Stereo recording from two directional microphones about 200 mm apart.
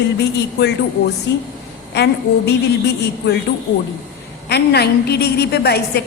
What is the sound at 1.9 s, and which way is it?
A woman's voice, 55° left (ahead or behind).